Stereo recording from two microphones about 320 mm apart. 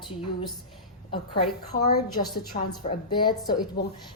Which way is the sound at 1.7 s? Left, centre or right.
Left.